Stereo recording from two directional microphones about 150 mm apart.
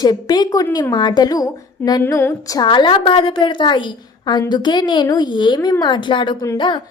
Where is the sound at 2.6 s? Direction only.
30° left (ahead or behind).